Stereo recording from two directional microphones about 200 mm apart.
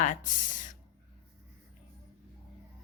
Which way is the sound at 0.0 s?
40° left (ahead or behind).